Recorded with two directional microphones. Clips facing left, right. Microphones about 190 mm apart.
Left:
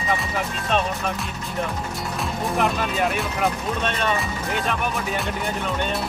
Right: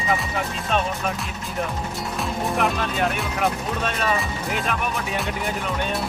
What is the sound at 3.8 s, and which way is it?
Speech, 5° right (ahead or behind).